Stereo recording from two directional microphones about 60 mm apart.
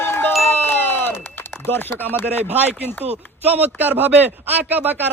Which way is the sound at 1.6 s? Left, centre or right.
Left.